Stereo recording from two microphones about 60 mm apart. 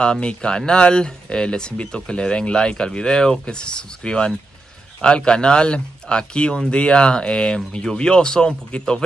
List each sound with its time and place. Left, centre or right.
0.0 s speech: centre